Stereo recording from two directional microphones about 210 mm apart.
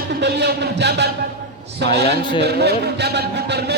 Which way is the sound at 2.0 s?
25° left (ahead or behind).